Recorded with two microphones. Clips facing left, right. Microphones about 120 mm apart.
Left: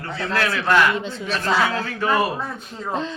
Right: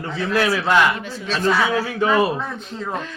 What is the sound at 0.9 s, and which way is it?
Speech, 25° left (ahead or behind).